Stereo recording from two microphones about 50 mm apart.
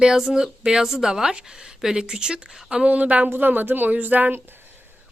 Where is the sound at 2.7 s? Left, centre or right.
Right.